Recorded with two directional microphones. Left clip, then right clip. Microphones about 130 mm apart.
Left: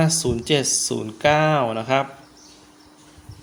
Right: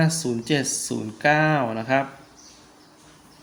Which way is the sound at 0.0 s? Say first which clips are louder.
Left 3 dB; 45° left (ahead or behind).